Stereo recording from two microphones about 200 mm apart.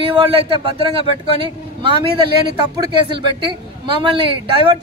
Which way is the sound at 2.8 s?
25° right (ahead or behind).